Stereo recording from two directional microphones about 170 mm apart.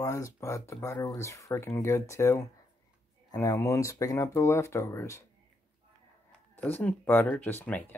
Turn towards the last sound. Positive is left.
turn(degrees=10)  # may be behind; listen again after turning